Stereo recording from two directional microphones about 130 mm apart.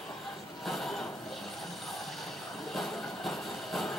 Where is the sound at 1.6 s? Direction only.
Centre (ahead or behind).